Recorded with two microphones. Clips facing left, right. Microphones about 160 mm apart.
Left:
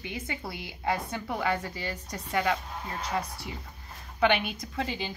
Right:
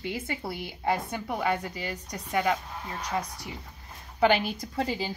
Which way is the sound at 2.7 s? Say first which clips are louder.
Even; centre (ahead or behind).